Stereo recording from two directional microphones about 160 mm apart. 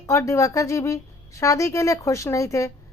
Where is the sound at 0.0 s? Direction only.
20° left (ahead or behind).